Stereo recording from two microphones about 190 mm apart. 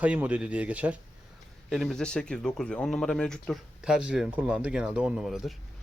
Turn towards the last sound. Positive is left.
turn(degrees=0)  # may be behind; listen again after turning